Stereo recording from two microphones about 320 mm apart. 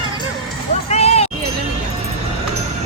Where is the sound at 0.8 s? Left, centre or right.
Centre.